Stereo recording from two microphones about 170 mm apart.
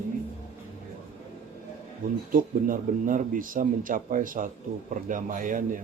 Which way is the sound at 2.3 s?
55° right (ahead or behind).